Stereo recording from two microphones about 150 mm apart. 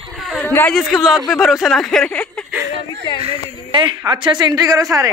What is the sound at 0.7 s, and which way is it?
Speech, centre (ahead or behind).